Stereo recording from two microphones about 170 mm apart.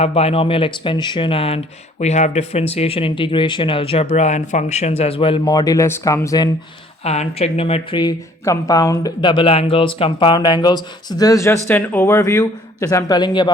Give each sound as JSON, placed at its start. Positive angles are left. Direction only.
{"t": 0.0, "sound": "speech", "side_deg": 35}
{"t": 5.5, "sound": "speech", "side_deg": 20}
{"t": 7.0, "sound": "speech", "side_deg": 35}